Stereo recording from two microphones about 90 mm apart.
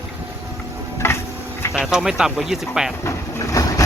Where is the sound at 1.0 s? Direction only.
30° left (ahead or behind).